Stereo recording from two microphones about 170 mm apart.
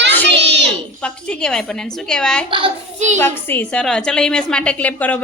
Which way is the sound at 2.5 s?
30° right (ahead or behind).